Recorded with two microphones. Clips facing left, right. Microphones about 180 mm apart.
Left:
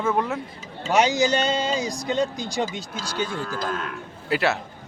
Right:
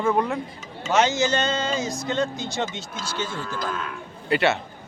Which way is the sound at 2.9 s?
35° left (ahead or behind).